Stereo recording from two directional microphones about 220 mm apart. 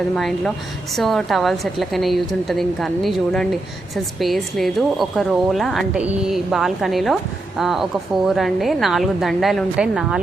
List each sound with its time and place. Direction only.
0.2 s a woman's voice: centre (ahead or behind)